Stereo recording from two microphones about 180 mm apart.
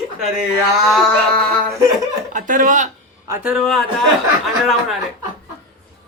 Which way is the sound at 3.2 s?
15° right (ahead or behind).